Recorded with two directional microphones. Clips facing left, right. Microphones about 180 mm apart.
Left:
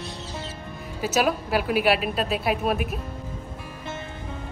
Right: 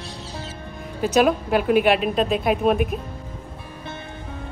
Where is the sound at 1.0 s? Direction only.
5° left (ahead or behind).